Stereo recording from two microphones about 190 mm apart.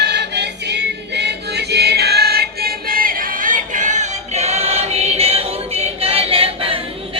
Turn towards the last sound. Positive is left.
turn(degrees=-30)  # may be behind; listen again after turning